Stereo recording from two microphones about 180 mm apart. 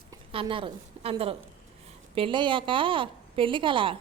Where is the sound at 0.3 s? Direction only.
30° right (ahead or behind).